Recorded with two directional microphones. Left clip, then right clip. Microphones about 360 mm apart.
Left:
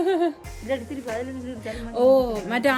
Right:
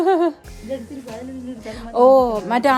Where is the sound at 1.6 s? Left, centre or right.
Centre.